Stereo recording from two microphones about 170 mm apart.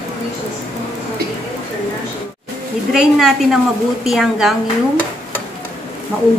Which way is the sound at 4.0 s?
Centre (ahead or behind).